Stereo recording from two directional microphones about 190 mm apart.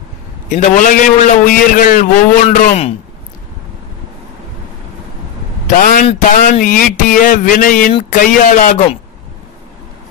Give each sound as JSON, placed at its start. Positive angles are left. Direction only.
{"t": 0.5, "sound": "speech", "side_deg": 45}
{"t": 2.5, "sound": "a man's voice", "side_deg": 35}
{"t": 5.7, "sound": "speech", "side_deg": 45}